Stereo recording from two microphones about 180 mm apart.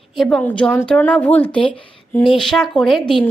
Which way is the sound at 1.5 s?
30° left (ahead or behind).